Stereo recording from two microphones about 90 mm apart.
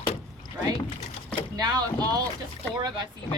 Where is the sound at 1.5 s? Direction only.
45° right (ahead or behind).